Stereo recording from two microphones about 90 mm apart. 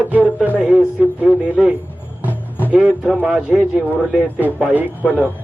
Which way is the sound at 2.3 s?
20° left (ahead or behind).